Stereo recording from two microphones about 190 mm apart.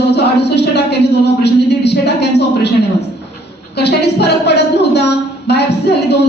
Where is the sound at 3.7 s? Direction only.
60° left (ahead or behind).